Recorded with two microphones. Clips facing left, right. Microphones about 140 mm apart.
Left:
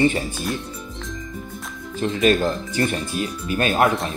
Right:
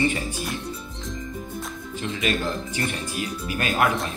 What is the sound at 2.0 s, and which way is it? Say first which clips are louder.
Speech: left 7 dB; 40° left (ahead or behind).